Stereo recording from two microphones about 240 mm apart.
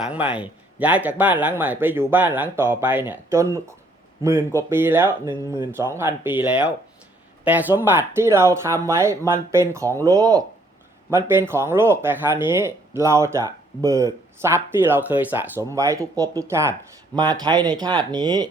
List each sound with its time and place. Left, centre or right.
0.0 s speech: centre